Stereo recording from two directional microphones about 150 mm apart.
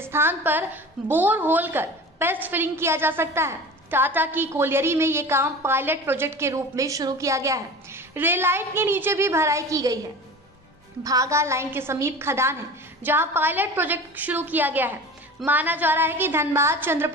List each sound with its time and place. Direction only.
0.0 s a woman's voice: 15° right (ahead or behind)
11.1 s a woman's voice: 20° right (ahead or behind)